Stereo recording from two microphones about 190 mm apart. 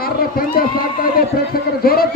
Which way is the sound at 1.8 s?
50° left (ahead or behind).